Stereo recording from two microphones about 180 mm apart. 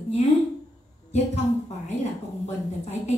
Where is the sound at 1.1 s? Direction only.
35° left (ahead or behind).